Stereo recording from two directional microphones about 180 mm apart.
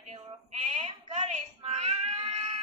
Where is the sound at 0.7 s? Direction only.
40° right (ahead or behind).